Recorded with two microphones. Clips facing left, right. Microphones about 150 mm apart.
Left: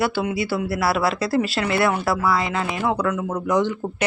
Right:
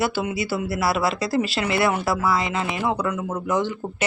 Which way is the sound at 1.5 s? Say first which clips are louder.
Left 1 dB; 20° right (ahead or behind).